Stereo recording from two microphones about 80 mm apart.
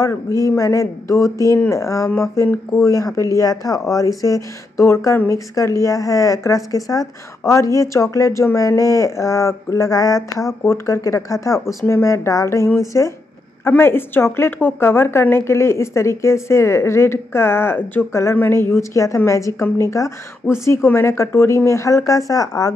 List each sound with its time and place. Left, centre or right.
0.3 s a woman's voice: left